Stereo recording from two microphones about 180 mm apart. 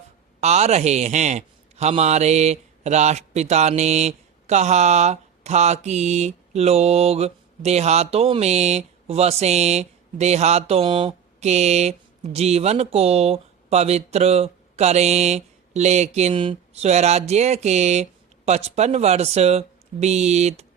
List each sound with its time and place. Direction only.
0.3 s a man's voice: 35° right (ahead or behind)